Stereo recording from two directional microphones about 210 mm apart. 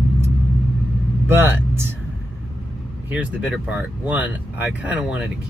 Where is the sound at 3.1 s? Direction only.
5° right (ahead or behind).